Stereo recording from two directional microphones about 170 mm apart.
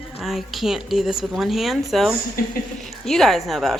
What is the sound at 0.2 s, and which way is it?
Speech, centre (ahead or behind).